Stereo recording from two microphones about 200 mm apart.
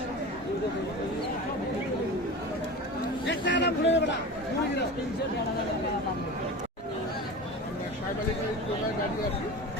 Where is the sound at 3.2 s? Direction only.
60° left (ahead or behind).